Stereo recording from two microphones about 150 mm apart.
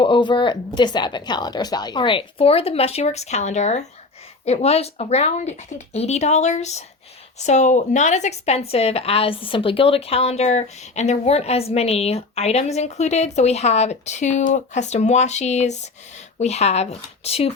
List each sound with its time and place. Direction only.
0.0 s a woman's voice: 30° left (ahead or behind)